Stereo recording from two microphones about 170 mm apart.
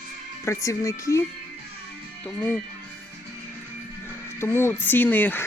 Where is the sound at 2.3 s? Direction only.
5° left (ahead or behind).